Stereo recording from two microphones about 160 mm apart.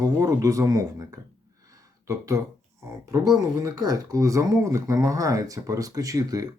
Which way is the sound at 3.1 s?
25° right (ahead or behind).